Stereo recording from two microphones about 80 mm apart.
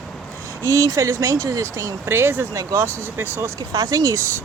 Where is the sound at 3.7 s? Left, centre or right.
Right.